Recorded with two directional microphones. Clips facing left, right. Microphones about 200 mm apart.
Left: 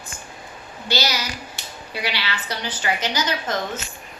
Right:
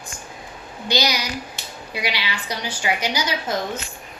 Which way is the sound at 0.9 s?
15° right (ahead or behind).